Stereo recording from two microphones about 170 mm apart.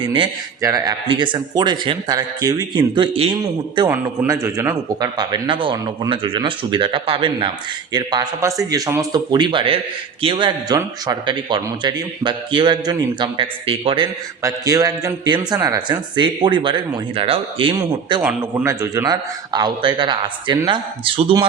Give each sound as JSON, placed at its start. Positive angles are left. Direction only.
{"t": 0.0, "sound": "a man's voice", "side_deg": -30}
{"t": 14.4, "sound": "a man's voice", "side_deg": -20}
{"t": 18.2, "sound": "a man's voice", "side_deg": -10}